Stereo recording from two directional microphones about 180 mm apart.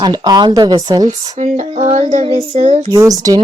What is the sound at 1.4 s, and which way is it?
Child singing, 40° right (ahead or behind).